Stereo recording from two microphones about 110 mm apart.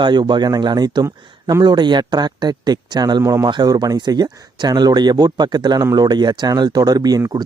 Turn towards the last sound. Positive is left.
turn(degrees=-35)  # may be behind; listen again after turning